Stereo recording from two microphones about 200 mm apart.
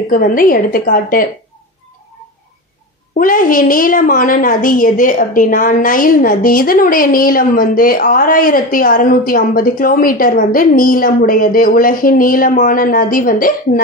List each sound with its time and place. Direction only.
0.1 s a woman's voice: 45° left (ahead or behind)
3.2 s a woman's voice: 45° left (ahead or behind)